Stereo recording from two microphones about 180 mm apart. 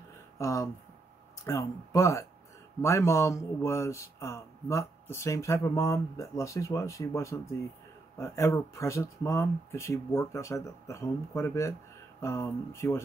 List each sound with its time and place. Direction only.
0.4 s speech: 15° left (ahead or behind)